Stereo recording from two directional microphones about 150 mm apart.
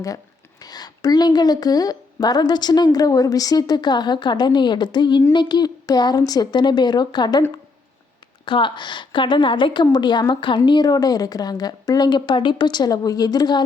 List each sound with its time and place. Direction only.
0.6 s speech: 25° left (ahead or behind)
8.4 s a woman's voice: 35° left (ahead or behind)